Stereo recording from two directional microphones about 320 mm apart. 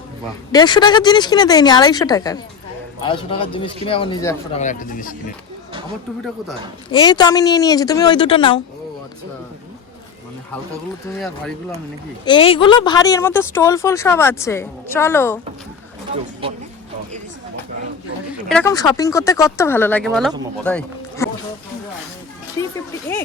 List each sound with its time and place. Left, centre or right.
0.5 s speech: centre
4.6 s speech: left
6.9 s speech: centre
11.1 s speech: centre
12.2 s speech: centre
18.4 s speech: centre